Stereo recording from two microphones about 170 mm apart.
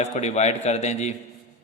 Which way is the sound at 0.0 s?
45° left (ahead or behind).